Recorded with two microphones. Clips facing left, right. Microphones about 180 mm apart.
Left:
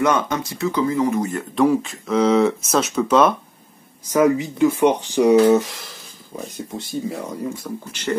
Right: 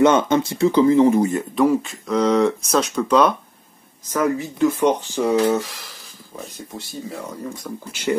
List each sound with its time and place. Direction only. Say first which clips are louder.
0.0 s speech: right 5 dB; 25° right (ahead or behind)
1.5 s speech: even; centre (ahead or behind)
4.0 s speech: left 4 dB; 15° left (ahead or behind)
7.9 s speech: right 2 dB; 10° right (ahead or behind)